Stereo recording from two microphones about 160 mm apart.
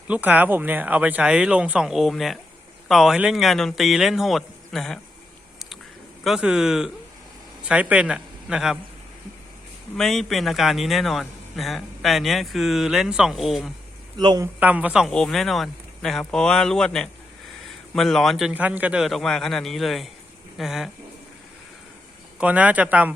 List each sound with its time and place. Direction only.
0.1 s speech: 10° right (ahead or behind)
6.2 s speech: 5° right (ahead or behind)
10.0 s speech: centre (ahead or behind)
14.2 s speech: 25° right (ahead or behind)
14.4 s speech: 10° right (ahead or behind)
22.4 s speech: 10° right (ahead or behind)